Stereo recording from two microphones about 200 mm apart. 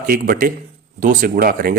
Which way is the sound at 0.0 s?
45° right (ahead or behind).